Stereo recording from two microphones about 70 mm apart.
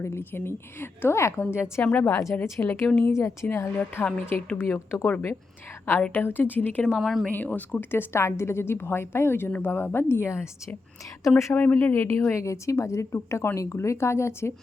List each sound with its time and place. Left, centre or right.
0.0 s a woman's voice: left
1.8 s a woman's voice: left
3.1 s a woman's voice: left
5.0 s a woman's voice: left
6.8 s a woman's voice: centre
7.3 s a woman's voice: left
11.5 s a woman's voice: left